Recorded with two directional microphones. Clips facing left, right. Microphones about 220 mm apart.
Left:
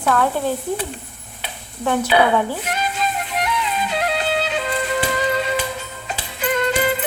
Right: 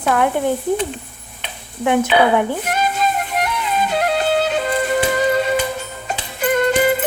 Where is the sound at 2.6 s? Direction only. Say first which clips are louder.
Right 4 dB; 50° right (ahead or behind).